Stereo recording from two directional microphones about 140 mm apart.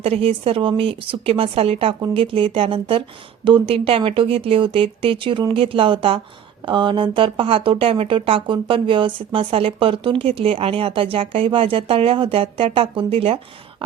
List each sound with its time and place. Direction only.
0.0 s speech: 45° right (ahead or behind)